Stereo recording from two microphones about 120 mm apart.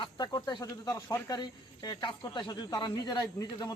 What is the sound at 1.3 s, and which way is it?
Speech, 35° left (ahead or behind).